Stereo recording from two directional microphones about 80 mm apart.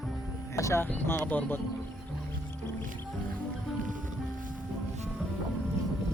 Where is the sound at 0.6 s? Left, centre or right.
Left.